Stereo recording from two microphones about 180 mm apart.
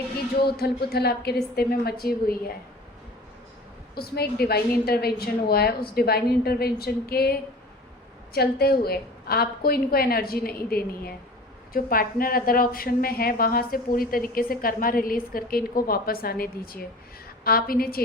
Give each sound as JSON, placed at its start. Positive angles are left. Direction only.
{"t": 0.3, "sound": "a woman's voice", "side_deg": 60}
{"t": 3.9, "sound": "a woman's voice", "side_deg": 60}